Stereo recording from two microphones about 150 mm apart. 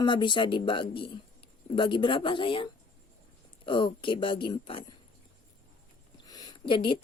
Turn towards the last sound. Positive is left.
turn(degrees=35)  # may be behind; listen again after turning